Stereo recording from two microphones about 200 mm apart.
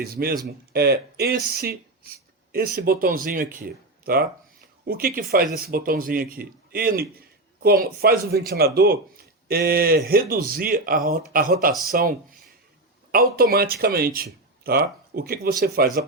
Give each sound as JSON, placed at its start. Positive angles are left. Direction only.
{"t": 0.0, "sound": "a man's voice", "side_deg": -50}